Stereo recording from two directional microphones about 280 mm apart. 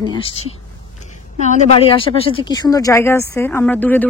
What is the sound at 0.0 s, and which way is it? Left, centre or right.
A woman's voice, centre.